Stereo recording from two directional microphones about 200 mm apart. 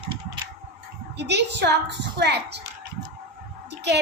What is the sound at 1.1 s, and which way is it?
A woman's voice, 55° right (ahead or behind).